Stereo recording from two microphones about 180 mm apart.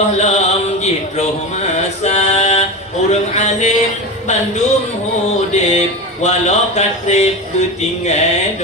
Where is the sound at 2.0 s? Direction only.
40° left (ahead or behind).